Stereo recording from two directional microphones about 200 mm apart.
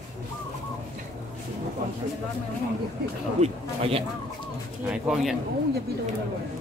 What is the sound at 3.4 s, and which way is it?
Speech, 30° right (ahead or behind).